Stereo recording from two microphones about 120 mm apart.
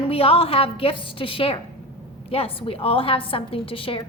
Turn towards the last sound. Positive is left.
turn(degrees=50)  # may be behind; listen again after turning